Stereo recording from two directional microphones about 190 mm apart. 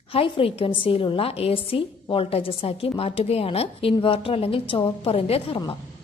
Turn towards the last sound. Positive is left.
turn(degrees=30)  # may be behind; listen again after turning